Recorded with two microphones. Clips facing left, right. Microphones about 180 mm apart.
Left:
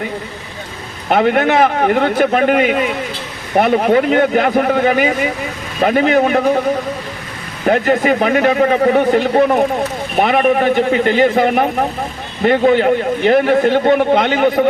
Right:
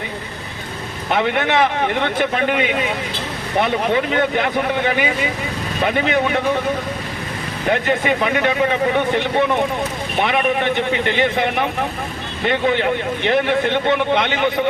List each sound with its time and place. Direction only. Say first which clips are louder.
1.1 s a man's voice: left 5 dB; 45° left (ahead or behind)
7.7 s a man's voice: left 5 dB; 40° left (ahead or behind)